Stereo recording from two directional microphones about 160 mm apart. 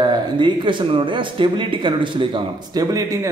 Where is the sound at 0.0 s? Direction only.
30° right (ahead or behind).